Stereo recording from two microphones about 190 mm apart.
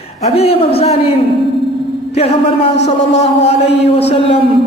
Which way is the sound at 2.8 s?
35° left (ahead or behind).